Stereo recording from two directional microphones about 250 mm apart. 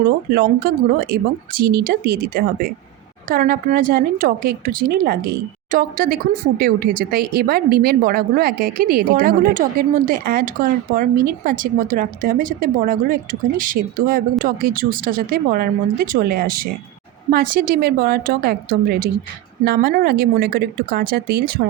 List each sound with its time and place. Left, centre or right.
0.0 s speech: right